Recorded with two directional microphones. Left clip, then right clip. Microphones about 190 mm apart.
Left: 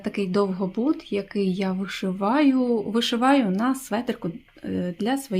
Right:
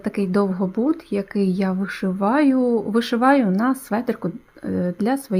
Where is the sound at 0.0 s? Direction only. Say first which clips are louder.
Right 2 dB; 20° right (ahead or behind).